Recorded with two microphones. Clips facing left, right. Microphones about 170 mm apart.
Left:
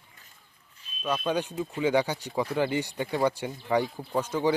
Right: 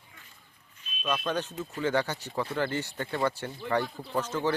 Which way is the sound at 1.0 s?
10° left (ahead or behind).